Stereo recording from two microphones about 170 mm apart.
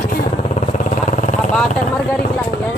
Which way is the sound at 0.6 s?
50° left (ahead or behind).